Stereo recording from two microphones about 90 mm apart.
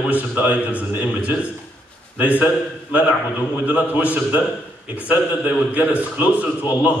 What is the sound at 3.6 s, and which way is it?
A man's voice, 15° right (ahead or behind).